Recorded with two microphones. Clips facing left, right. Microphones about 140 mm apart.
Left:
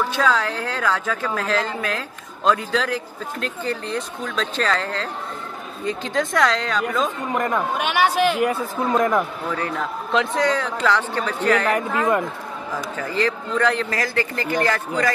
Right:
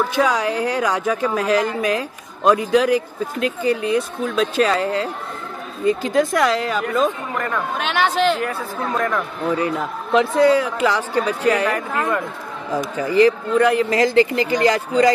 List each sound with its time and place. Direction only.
0.1 s speech: 15° right (ahead or behind)
7.3 s speech: 15° left (ahead or behind)
9.6 s speech: 10° right (ahead or behind)
12.7 s speech: 15° right (ahead or behind)